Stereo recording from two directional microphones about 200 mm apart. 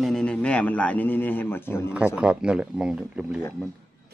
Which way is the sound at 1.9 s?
5° right (ahead or behind).